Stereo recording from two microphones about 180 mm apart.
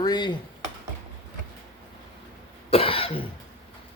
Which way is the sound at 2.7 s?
30° left (ahead or behind).